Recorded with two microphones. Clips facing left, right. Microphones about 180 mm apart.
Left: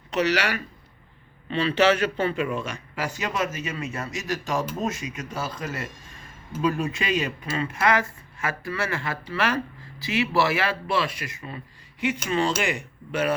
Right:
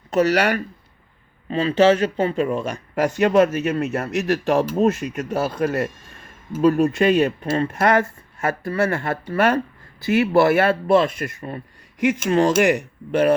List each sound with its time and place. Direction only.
0.1 s speech: 45° right (ahead or behind)
3.2 s speech: 60° right (ahead or behind)
6.6 s speech: 45° right (ahead or behind)
6.9 s speech: 60° right (ahead or behind)